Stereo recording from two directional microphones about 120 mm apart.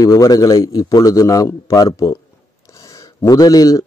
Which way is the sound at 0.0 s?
30° left (ahead or behind).